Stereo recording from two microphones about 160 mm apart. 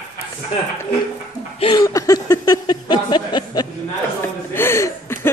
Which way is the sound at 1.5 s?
30° left (ahead or behind).